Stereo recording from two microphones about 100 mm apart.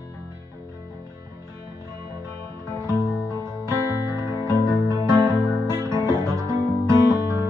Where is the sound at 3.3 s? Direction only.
25° right (ahead or behind).